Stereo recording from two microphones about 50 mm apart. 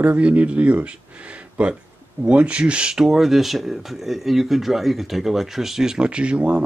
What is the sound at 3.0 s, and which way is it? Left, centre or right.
Speech, centre.